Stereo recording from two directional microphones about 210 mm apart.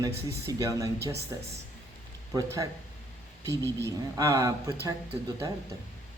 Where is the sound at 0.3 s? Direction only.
15° right (ahead or behind).